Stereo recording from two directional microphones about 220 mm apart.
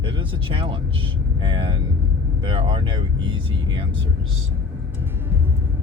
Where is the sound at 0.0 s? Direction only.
25° right (ahead or behind).